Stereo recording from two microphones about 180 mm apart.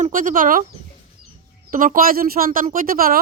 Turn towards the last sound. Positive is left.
turn(degrees=-55)  # may be behind; listen again after turning